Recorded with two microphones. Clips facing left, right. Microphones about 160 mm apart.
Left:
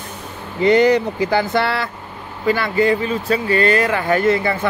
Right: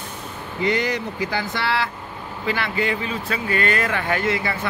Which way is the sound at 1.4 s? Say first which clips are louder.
Left 8 dB; 55° left (ahead or behind).